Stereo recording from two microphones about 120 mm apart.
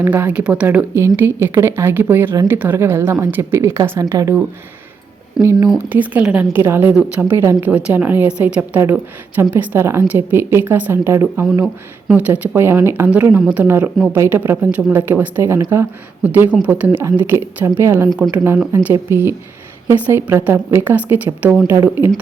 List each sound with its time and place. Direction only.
0.0 s speech: 15° right (ahead or behind)
0.9 s a woman's voice: 20° right (ahead or behind)
5.4 s a woman's voice: 30° right (ahead or behind)
5.9 s a woman's voice: 10° right (ahead or behind)
11.6 s a woman's voice: 10° right (ahead or behind)